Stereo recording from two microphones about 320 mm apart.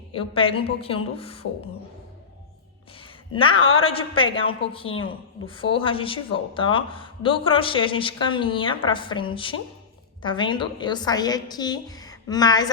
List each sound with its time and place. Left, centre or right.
0.1 s speech: centre
3.3 s speech: centre